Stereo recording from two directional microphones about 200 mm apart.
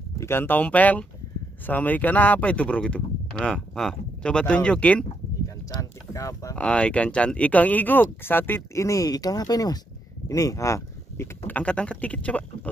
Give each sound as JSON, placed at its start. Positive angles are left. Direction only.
{"t": 0.2, "sound": "speech", "side_deg": 10}
{"t": 6.6, "sound": "speech", "side_deg": 5}